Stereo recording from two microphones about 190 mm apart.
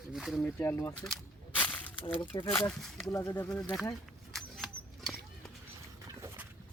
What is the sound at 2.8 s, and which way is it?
Speech, centre (ahead or behind).